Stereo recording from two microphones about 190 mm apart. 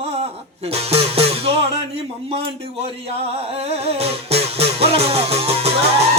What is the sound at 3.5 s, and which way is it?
Music, 30° right (ahead or behind).